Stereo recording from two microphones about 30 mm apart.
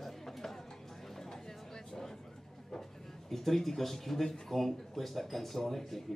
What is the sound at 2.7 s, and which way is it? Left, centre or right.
A man's voice, centre.